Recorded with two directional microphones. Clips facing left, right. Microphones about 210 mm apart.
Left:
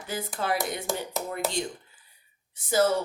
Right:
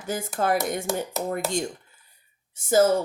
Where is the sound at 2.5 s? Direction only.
45° right (ahead or behind).